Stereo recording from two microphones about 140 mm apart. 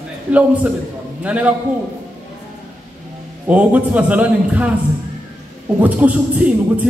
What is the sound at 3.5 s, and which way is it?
Speech, 10° right (ahead or behind).